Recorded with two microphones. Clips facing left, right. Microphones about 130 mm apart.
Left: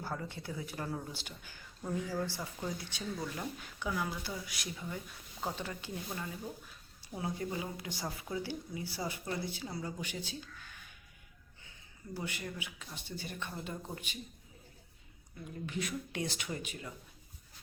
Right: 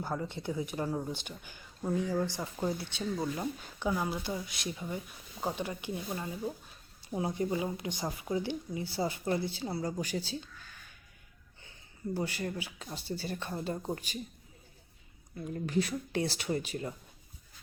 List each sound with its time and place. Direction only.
0.0 s speech: 20° right (ahead or behind)
7.1 s speech: 25° right (ahead or behind)
12.1 s speech: 35° right (ahead or behind)
15.6 s speech: 35° right (ahead or behind)